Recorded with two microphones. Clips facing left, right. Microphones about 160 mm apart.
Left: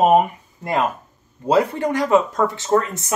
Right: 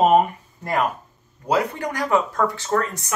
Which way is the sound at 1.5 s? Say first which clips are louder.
Left 5 dB; 25° left (ahead or behind).